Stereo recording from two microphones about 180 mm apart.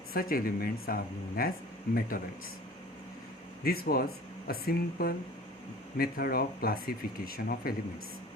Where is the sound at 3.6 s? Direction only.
55° left (ahead or behind).